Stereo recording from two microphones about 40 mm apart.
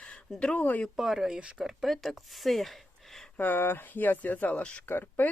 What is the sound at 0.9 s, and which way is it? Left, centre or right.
Speech, centre.